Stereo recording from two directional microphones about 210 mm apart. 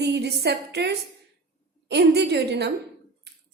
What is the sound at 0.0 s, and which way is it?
A woman's voice, 50° right (ahead or behind).